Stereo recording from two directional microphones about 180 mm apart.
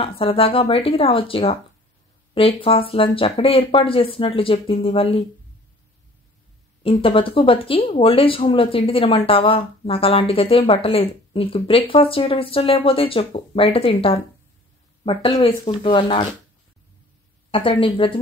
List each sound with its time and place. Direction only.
0.0 s speech: 30° left (ahead or behind)
6.8 s speech: 30° left (ahead or behind)
17.5 s speech: 30° left (ahead or behind)